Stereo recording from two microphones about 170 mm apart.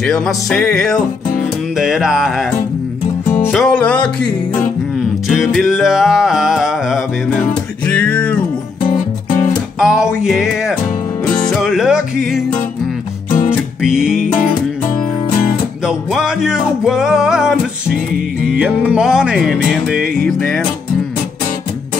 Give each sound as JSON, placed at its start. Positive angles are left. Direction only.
{"t": 0.0, "sound": "music", "side_deg": 5}
{"t": 3.5, "sound": "music", "side_deg": 5}
{"t": 8.8, "sound": "music", "side_deg": 50}
{"t": 9.8, "sound": "music", "side_deg": -5}
{"t": 13.8, "sound": "music", "side_deg": -5}
{"t": 14.2, "sound": "music", "side_deg": 50}
{"t": 16.1, "sound": "music", "side_deg": -5}